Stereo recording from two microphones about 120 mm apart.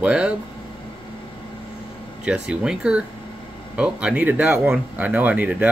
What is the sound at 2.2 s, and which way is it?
Speech, 10° right (ahead or behind).